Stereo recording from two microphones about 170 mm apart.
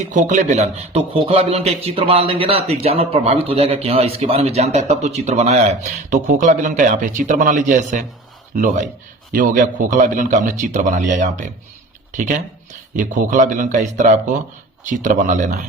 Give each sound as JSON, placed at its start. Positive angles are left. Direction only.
{"t": 0.1, "sound": "a man's voice", "side_deg": -45}